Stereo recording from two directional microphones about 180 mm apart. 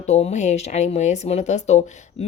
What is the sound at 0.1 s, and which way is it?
A woman's voice, 35° left (ahead or behind).